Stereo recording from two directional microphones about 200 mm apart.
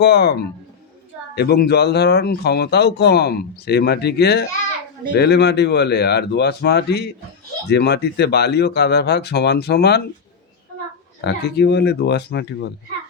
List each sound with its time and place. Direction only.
0.0 s speech: 55° left (ahead or behind)
11.2 s speech: 55° left (ahead or behind)